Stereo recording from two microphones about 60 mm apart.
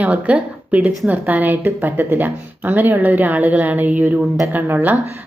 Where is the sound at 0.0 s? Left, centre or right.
Right.